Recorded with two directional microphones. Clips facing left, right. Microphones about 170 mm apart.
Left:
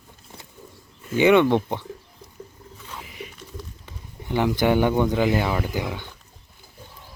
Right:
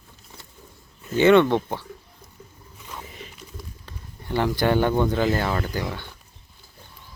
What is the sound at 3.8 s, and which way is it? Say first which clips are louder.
Speech: left 2 dB; 15° left (ahead or behind).